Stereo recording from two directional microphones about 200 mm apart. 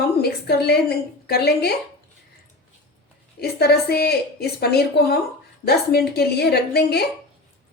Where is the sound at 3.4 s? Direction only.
55° left (ahead or behind).